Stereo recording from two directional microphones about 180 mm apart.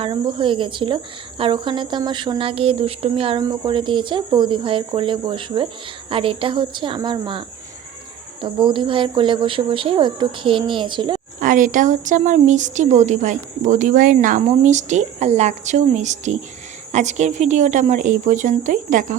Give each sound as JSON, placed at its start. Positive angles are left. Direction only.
{"t": 0.0, "sound": "speech", "side_deg": -30}
{"t": 11.3, "sound": "a woman's voice", "side_deg": -45}